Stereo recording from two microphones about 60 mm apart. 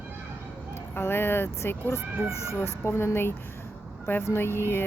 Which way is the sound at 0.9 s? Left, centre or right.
Left.